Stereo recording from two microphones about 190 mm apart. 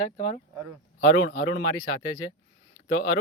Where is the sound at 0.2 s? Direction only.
35° left (ahead or behind).